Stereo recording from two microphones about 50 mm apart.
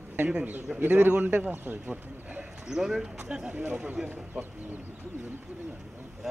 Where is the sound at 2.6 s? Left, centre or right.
Centre.